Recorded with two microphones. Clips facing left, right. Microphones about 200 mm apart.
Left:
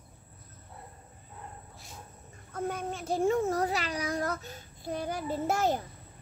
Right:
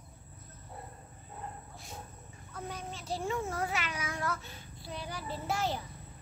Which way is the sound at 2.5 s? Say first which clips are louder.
Left 8 dB; 50° left (ahead or behind).